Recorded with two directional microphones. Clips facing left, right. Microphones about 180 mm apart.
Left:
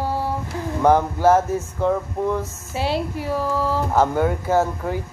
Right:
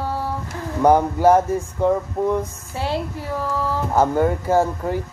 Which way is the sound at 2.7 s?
15° left (ahead or behind).